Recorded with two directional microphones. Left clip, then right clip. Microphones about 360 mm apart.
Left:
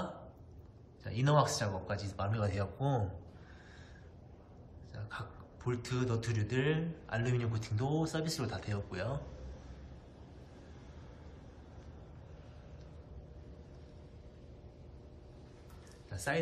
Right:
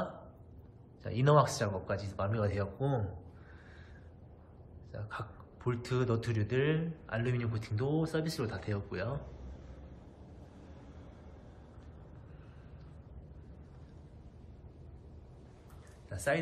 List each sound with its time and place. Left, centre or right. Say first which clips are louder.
1.0 s a man's voice: right 3 dB; centre
4.9 s a man's voice: right 3 dB; centre